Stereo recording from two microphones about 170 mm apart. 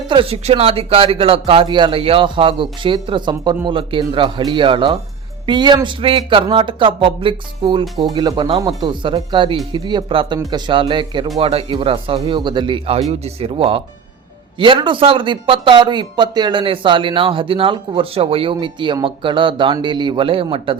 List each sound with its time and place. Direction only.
0.1 s a man's voice: 30° right (ahead or behind)